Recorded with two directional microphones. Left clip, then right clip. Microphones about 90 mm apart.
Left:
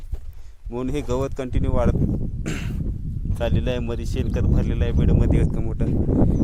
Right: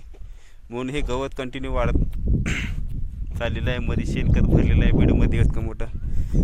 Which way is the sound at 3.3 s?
90° left.